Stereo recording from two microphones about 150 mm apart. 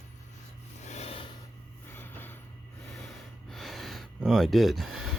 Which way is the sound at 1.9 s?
15° left (ahead or behind).